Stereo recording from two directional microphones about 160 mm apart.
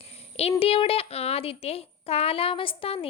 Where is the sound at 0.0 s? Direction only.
40° left (ahead or behind).